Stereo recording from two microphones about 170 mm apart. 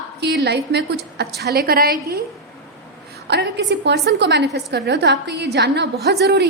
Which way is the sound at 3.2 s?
85° right.